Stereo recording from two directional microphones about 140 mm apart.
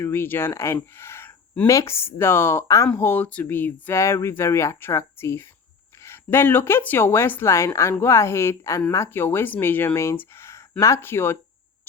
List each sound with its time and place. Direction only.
0.0 s speech: 15° left (ahead or behind)